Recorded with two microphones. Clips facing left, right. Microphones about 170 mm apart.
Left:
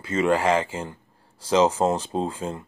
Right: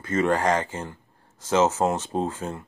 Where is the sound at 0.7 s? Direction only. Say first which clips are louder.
Left 2 dB; 10° left (ahead or behind).